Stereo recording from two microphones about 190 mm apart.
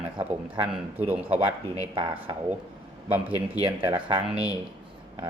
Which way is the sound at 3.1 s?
10° right (ahead or behind).